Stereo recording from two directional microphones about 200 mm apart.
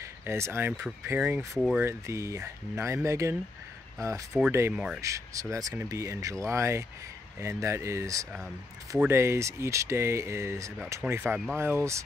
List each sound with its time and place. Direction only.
0.0 s speech: 15° right (ahead or behind)
5.0 s speech: 15° right (ahead or behind)